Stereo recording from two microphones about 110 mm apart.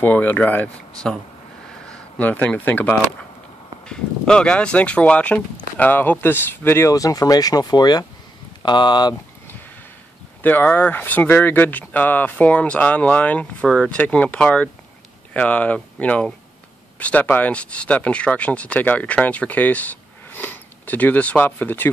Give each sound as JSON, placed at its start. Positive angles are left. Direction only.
{"t": 0.0, "sound": "speech", "side_deg": 15}
{"t": 10.4, "sound": "speech", "side_deg": 15}